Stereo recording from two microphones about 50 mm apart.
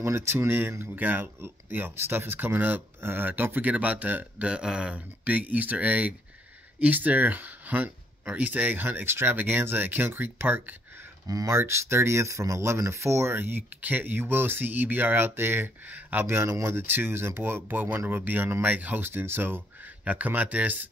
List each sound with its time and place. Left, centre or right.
0.0 s speech: right
0.9 s speech: right
4.5 s speech: centre; by 11.1 s right
11.4 s speech: right
13.4 s speech: right
13.7 s speech: right
16.3 s speech: right
16.7 s speech: right
17.6 s speech: right
19.0 s speech: right
20.1 s speech: right